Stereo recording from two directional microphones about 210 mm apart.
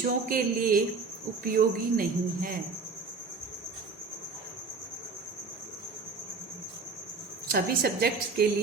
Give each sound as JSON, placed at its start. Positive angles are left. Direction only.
{"t": 0.0, "sound": "a woman's voice", "side_deg": -45}
{"t": 7.4, "sound": "a woman's voice", "side_deg": -45}